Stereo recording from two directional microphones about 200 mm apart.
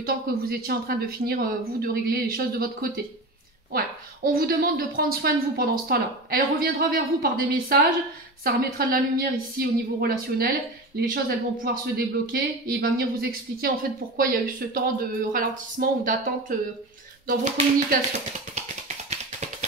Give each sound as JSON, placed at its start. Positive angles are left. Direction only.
{"t": 0.0, "sound": "a woman's voice", "side_deg": -45}